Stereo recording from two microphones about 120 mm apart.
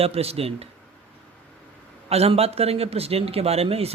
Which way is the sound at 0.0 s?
55° right (ahead or behind).